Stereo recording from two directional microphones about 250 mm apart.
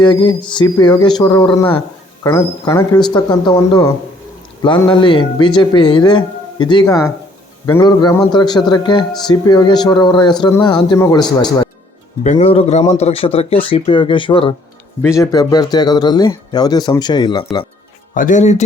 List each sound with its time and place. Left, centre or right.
0.0 s a man's voice: centre
18.1 s speech: left